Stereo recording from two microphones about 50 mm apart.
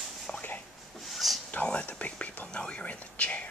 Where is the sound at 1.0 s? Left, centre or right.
Centre.